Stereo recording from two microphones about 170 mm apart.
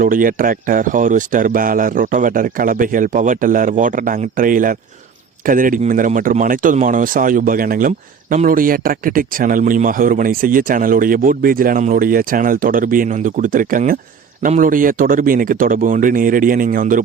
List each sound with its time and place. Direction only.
0.0 s speech: 55° right (ahead or behind)